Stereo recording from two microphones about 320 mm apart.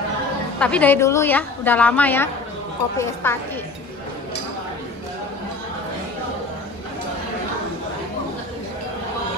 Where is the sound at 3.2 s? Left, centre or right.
Centre.